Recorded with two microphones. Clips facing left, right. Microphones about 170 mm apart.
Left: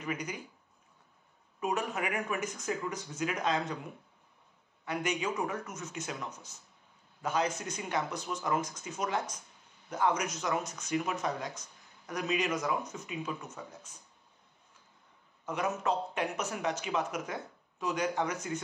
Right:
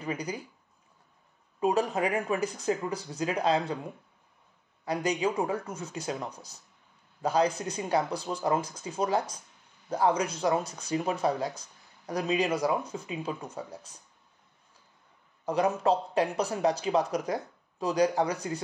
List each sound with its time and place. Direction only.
0.0 s speech: 35° right (ahead or behind)
1.6 s speech: 35° right (ahead or behind)
4.8 s speech: 35° right (ahead or behind)
15.4 s speech: 35° right (ahead or behind)